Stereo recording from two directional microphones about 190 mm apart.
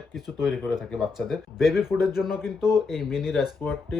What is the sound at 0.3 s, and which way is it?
Speech, centre (ahead or behind).